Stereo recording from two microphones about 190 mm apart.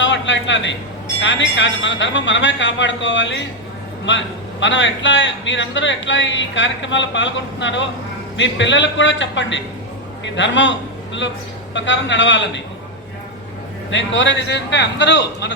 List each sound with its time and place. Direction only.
0.0 s a sound: 75° left (ahead or behind)
1.2 s a man's voice: 70° left (ahead or behind)
13.9 s a man's voice: 75° left (ahead or behind)